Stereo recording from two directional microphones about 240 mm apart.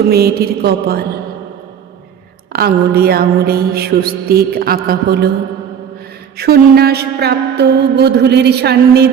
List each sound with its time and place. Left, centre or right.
0.1 s mantra: right
2.5 s mantra: right
6.3 s mantra: right